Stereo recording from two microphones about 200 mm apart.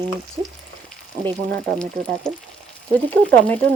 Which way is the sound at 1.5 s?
5° left (ahead or behind).